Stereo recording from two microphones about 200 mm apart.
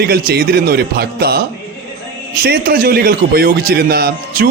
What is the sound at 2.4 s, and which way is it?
A man's voice, 50° right (ahead or behind).